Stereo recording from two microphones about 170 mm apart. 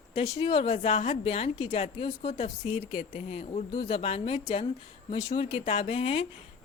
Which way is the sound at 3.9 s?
35° left (ahead or behind).